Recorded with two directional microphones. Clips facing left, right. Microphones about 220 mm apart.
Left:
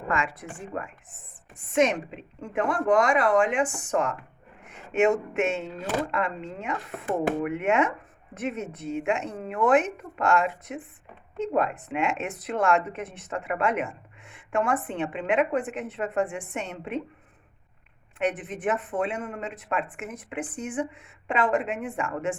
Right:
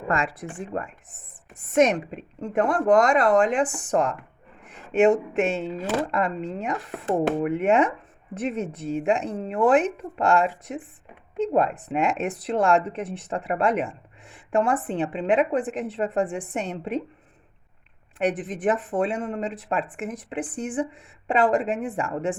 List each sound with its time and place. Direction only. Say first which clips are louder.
0.1 s speech: right 3 dB; 35° right (ahead or behind)
18.2 s speech: right 3 dB; 35° right (ahead or behind)